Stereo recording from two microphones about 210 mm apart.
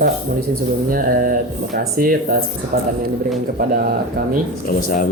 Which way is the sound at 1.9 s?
40° right (ahead or behind).